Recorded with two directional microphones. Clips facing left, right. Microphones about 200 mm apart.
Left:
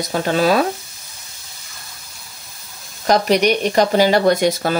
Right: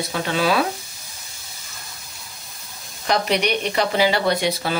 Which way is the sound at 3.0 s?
40° left (ahead or behind).